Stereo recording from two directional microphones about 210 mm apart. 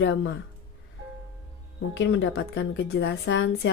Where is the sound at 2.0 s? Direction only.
60° left (ahead or behind).